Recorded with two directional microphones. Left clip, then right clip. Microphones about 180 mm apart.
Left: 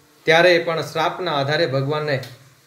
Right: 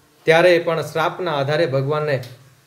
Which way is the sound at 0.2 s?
15° right (ahead or behind).